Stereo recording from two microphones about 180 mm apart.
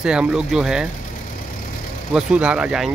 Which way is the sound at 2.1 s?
5° right (ahead or behind).